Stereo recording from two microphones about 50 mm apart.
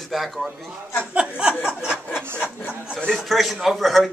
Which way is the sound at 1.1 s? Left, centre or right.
Right.